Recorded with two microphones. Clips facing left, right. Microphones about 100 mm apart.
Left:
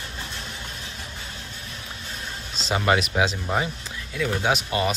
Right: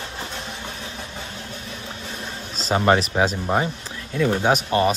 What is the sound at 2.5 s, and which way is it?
Speech, 40° right (ahead or behind).